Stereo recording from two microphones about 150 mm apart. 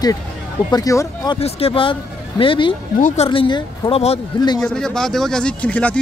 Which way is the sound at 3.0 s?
50° left (ahead or behind).